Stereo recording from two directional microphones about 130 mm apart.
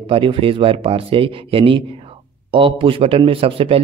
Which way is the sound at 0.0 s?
45° right (ahead or behind).